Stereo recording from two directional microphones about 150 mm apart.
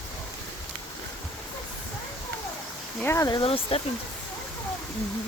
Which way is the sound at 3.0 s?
20° left (ahead or behind).